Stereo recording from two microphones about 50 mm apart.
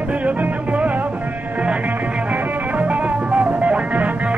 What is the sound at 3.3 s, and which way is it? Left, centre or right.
Music, right.